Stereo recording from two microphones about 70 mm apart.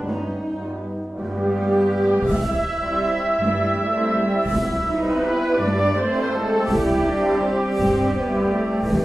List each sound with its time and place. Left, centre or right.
1.4 s music: centre
3.4 s music: right
4.4 s music: centre